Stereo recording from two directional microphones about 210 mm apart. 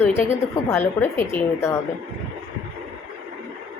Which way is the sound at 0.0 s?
10° left (ahead or behind).